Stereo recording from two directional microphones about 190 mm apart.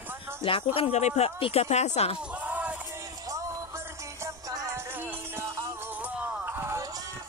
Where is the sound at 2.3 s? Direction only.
10° right (ahead or behind).